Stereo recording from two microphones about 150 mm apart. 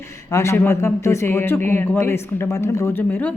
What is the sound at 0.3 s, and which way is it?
Speech, 20° left (ahead or behind).